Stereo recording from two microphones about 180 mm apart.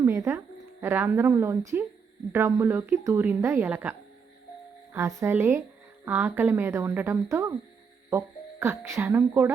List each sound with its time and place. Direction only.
0.0 s a woman's voice: 15° right (ahead or behind)
4.9 s a woman's voice: 15° right (ahead or behind)
8.6 s a woman's voice: 15° right (ahead or behind)